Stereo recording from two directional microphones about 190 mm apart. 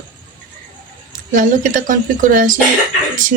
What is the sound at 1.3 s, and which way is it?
Speech, 45° right (ahead or behind).